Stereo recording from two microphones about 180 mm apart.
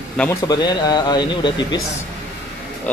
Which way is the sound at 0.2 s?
5° left (ahead or behind).